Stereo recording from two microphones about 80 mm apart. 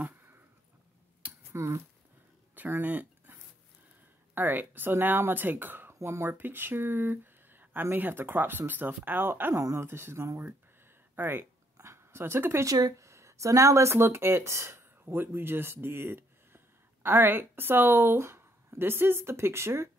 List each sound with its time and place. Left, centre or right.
1.5 s speech: right
2.5 s a sound: right
4.4 s speech: right
9.6 s speech: right
9.8 s speech: right
11.1 s speech: right
11.7 s a sound: right
12.6 s speech: right
13.0 s speech: right